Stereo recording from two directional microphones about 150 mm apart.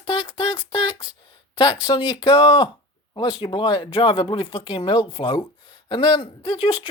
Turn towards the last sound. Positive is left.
turn(degrees=30)  # may be behind; listen again after turning